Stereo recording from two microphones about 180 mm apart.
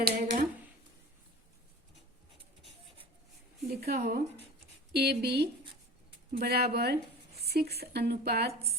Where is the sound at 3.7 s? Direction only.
60° right (ahead or behind).